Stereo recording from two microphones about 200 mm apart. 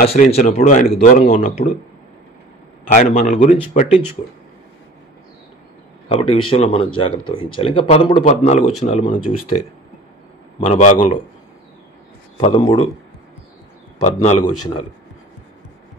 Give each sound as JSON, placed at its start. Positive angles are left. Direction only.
{"t": 0.1, "sound": "a man's voice", "side_deg": 30}
{"t": 2.9, "sound": "a man's voice", "side_deg": 40}
{"t": 6.0, "sound": "a man's voice", "side_deg": 30}
{"t": 10.6, "sound": "a man's voice", "side_deg": 35}
{"t": 12.4, "sound": "speech", "side_deg": 25}
{"t": 14.0, "sound": "a man's voice", "side_deg": 35}